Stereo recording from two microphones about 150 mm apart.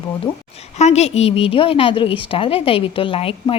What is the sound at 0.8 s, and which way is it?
A woman's voice, 45° left (ahead or behind).